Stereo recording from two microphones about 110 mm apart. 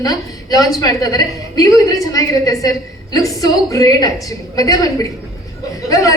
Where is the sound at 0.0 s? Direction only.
35° left (ahead or behind).